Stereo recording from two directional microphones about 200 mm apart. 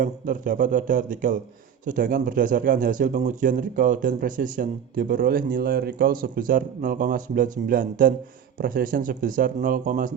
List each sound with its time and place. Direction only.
0.0 s speech: 45° right (ahead or behind)